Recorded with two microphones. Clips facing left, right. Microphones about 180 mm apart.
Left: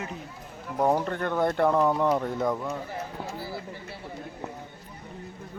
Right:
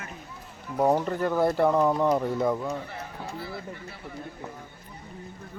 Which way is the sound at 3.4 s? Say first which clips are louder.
Right 1 dB; 35° left (ahead or behind).